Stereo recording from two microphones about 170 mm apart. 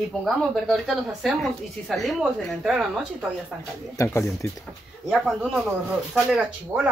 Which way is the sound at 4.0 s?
20° left (ahead or behind).